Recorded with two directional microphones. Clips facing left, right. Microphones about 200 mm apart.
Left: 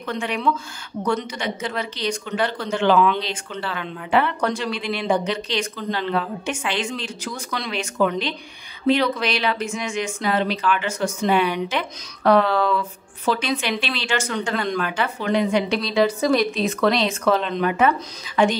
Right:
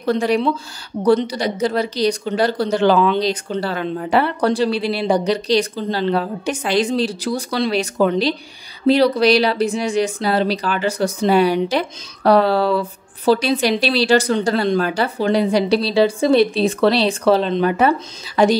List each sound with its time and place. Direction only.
0.0 s a woman's voice: 35° right (ahead or behind)